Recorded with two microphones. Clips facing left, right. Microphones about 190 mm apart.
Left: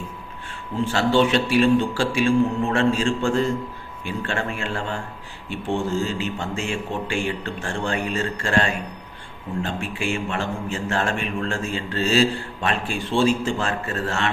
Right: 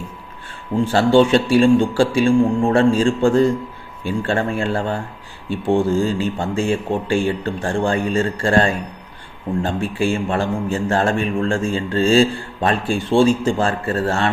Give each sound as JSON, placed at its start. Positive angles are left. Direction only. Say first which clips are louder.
{"t": 0.7, "sound": "speech", "louder": "right 6 dB", "side_deg": -45}
{"t": 1.2, "sound": "a man's voice", "louder": "right 5 dB", "side_deg": -30}